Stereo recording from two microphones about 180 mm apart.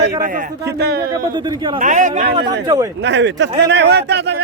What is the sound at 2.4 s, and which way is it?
Speech, 25° right (ahead or behind).